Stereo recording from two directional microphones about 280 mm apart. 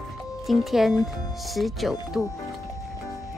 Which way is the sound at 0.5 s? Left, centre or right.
Centre.